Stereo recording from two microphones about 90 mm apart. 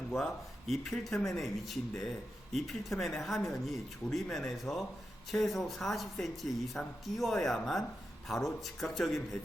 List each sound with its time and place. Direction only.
0.7 s speech: centre (ahead or behind)